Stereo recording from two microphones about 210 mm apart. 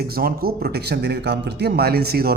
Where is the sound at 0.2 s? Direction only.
45° right (ahead or behind).